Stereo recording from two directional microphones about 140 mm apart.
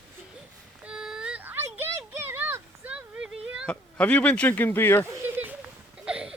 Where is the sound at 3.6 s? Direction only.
10° left (ahead or behind).